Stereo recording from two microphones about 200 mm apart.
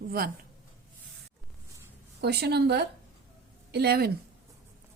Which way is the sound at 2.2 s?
55° right (ahead or behind).